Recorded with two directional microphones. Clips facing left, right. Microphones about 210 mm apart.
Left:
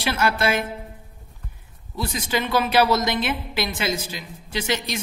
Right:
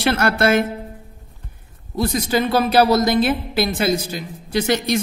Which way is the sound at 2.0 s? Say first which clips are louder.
Right 7 dB; 40° right (ahead or behind).